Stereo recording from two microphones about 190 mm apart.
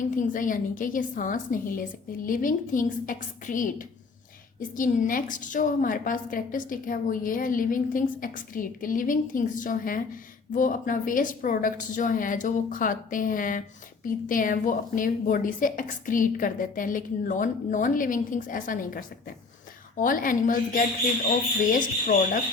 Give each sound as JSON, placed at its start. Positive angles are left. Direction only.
{"t": 0.0, "sound": "a woman's voice", "side_deg": 45}